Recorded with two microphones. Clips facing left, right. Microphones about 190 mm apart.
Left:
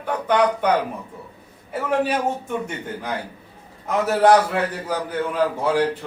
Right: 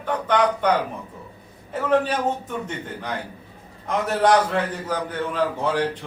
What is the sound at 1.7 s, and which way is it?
Speech, 10° left (ahead or behind).